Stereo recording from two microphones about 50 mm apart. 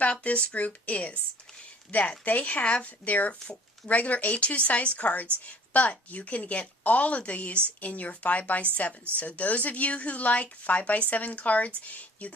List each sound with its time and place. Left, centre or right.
0.0 s a woman's voice: left